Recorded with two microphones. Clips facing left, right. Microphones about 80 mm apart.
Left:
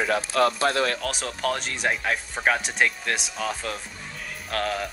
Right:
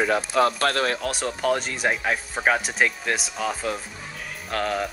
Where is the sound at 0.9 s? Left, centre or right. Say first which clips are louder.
Right 3 dB; centre.